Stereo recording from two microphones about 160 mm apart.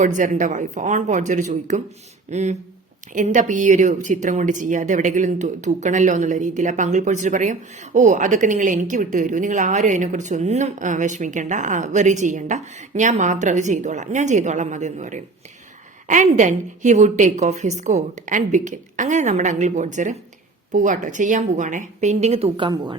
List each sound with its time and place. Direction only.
0.0 s a woman's voice: 50° right (ahead or behind); by 23.0 s 25° right (ahead or behind)